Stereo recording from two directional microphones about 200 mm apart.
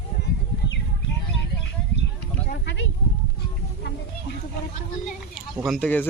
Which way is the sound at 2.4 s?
45° left (ahead or behind).